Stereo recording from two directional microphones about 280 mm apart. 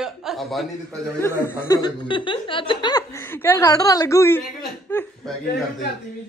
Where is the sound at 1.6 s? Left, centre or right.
Centre.